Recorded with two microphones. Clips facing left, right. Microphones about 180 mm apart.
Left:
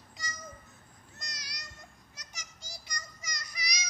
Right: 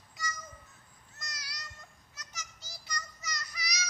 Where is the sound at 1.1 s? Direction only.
20° left (ahead or behind).